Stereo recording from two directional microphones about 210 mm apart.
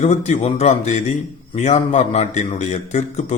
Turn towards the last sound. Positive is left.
turn(degrees=35)  # may be behind; listen again after turning